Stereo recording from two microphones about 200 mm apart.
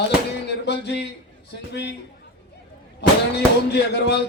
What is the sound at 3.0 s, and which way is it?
Speech, 55° left (ahead or behind).